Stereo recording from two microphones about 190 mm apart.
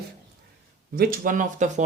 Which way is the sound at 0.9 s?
50° right (ahead or behind).